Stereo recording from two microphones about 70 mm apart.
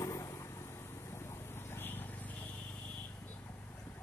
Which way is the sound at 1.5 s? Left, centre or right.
Left.